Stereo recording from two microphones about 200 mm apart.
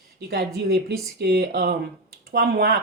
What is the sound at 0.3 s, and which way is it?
A woman's voice, 55° right (ahead or behind).